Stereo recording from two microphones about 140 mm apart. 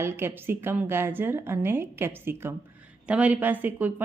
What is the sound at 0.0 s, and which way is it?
A woman's voice, 15° right (ahead or behind).